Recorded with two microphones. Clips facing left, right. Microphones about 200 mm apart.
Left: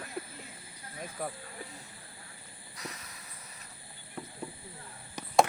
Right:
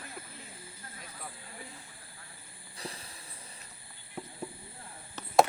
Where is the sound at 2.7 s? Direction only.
30° right (ahead or behind).